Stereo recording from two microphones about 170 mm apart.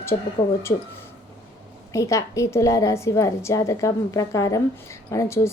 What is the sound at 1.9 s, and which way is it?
A woman's voice, 20° left (ahead or behind).